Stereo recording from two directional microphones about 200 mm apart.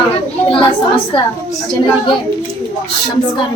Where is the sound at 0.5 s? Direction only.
25° left (ahead or behind).